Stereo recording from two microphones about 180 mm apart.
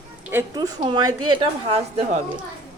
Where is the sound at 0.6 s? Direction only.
25° right (ahead or behind).